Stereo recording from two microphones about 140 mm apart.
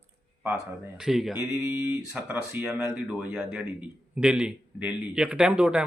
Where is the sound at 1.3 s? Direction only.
20° right (ahead or behind).